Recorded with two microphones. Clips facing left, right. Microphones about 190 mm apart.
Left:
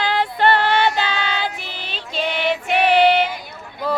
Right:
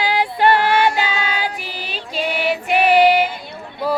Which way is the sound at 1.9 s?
10° right (ahead or behind).